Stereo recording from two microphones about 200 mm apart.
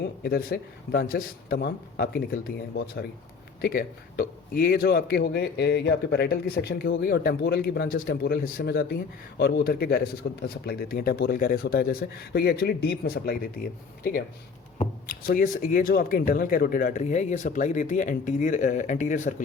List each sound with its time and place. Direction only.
0.0 s speech: 50° left (ahead or behind)